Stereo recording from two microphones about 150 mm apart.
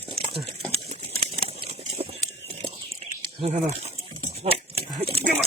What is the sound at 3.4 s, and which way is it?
Speech, 45° right (ahead or behind).